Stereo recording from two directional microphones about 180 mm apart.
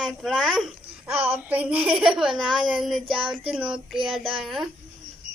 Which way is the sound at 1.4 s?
10° right (ahead or behind).